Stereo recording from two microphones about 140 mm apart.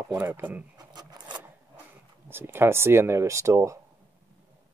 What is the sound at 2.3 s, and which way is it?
Speech, 15° right (ahead or behind).